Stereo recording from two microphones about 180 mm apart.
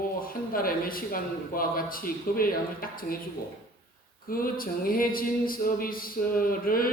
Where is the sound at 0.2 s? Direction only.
55° left (ahead or behind).